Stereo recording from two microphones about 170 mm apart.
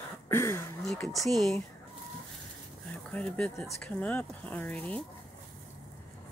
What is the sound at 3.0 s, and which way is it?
A woman's voice, 5° left (ahead or behind).